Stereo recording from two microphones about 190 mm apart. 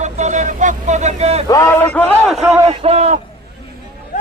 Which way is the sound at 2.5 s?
35° right (ahead or behind).